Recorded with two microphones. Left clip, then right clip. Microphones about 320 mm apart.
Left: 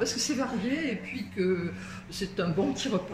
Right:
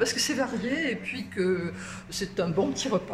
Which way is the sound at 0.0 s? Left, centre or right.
Right.